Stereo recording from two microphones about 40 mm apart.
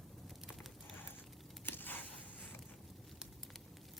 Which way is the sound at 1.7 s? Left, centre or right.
Left.